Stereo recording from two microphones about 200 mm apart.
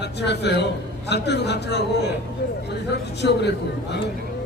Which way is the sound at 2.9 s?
60° left (ahead or behind).